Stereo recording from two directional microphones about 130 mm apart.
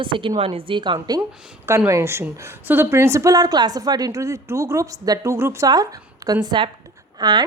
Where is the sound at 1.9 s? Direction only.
20° right (ahead or behind).